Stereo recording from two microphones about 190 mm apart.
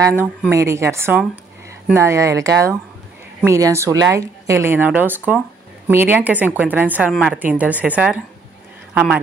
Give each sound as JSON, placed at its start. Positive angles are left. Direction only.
{"t": 0.1, "sound": "speech", "side_deg": 10}
{"t": 0.5, "sound": "a man's voice", "side_deg": -15}